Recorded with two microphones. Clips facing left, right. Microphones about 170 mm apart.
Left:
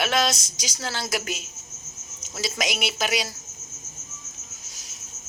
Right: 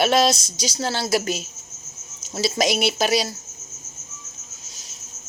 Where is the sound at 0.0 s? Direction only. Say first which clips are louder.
Right 6 dB; 30° right (ahead or behind).